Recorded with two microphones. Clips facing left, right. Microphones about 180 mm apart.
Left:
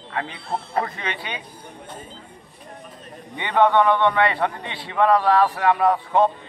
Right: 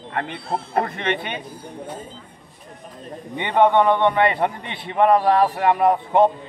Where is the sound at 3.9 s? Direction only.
20° right (ahead or behind).